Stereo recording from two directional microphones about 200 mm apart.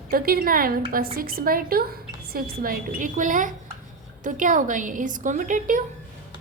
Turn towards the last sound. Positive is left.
turn(degrees=-40)  # may be behind; listen again after turning